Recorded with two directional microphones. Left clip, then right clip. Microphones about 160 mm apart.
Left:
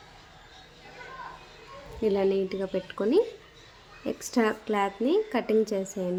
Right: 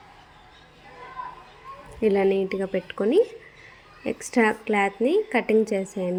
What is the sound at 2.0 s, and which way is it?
A woman's voice, 25° right (ahead or behind).